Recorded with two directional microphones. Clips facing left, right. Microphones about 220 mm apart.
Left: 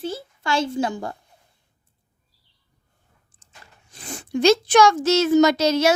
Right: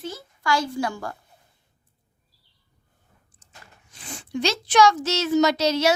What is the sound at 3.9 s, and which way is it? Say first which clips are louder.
A child's voice: left 4 dB; 45° left (ahead or behind).